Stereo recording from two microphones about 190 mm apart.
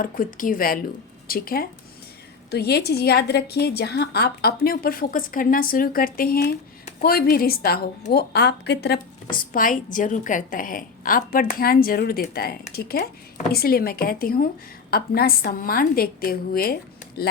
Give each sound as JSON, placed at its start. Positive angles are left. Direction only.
{"t": 0.0, "sound": "a woman's voice", "side_deg": 45}